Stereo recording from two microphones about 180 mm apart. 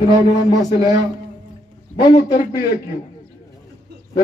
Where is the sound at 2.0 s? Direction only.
25° left (ahead or behind).